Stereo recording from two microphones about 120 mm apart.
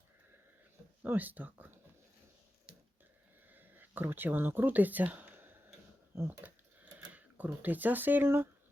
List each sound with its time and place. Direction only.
1.0 s speech: 15° right (ahead or behind)
3.5 s speech: 15° right (ahead or behind)